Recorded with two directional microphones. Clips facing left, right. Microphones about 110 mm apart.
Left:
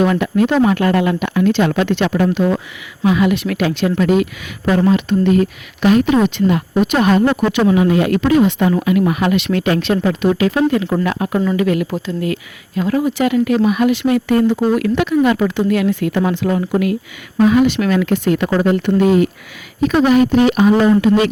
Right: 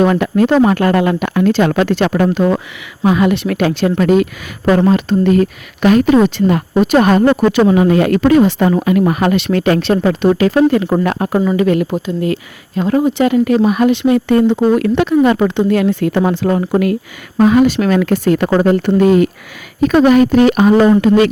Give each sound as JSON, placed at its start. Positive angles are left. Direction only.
{"t": 0.0, "sound": "speech", "side_deg": -40}
{"t": 2.0, "sound": "a woman's voice", "side_deg": -55}
{"t": 13.9, "sound": "a woman's voice", "side_deg": -25}